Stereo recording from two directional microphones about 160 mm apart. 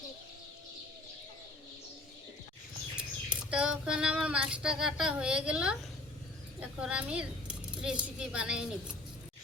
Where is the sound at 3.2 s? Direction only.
5° right (ahead or behind).